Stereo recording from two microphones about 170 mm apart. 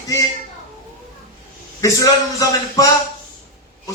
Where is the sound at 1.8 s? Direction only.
20° left (ahead or behind).